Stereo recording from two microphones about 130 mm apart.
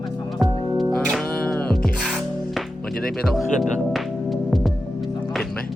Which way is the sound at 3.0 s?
5° left (ahead or behind).